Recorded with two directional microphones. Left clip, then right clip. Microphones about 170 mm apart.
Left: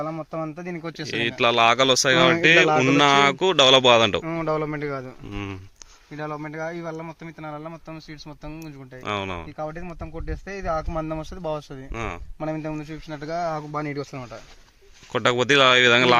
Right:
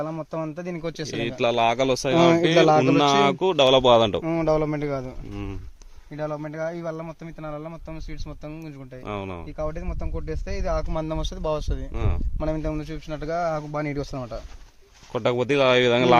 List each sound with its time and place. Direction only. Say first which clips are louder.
0.2 s speech: even; 30° right (ahead or behind)
1.1 s speech: left 3 dB; 5° right (ahead or behind)
2.6 s speech: right 1 dB; 55° right (ahead or behind)
3.0 s speech: left 2 dB; centre (ahead or behind)
4.2 s a man's voice: right 3 dB; 90° right
5.3 s speech: left 6 dB; centre (ahead or behind)
6.1 s speech: right 1 dB; 45° right (ahead or behind)
9.0 s speech: left 5 dB; centre (ahead or behind)
9.6 s speech: right 1 dB; 35° right (ahead or behind)
11.9 s speech: left 4 dB; centre (ahead or behind)
12.4 s speech: right 2 dB; 35° right (ahead or behind)
15.1 s speech: left 3 dB; centre (ahead or behind)